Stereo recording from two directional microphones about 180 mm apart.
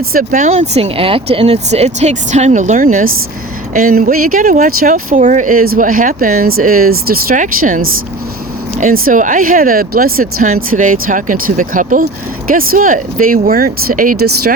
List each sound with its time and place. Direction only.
0.1 s speech: 50° right (ahead or behind)